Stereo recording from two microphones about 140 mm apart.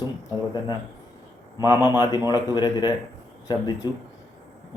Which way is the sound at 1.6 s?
30° left (ahead or behind).